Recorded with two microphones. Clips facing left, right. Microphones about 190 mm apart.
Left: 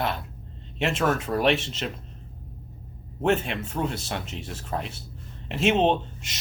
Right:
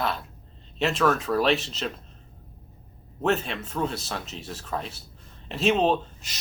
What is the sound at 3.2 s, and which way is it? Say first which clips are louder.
Speech: left 2 dB; 30° left (ahead or behind).